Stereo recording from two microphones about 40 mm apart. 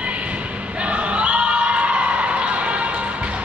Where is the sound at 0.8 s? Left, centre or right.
Right.